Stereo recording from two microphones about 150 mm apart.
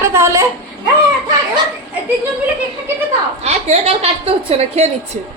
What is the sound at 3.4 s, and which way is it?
A woman's voice, 45° right (ahead or behind).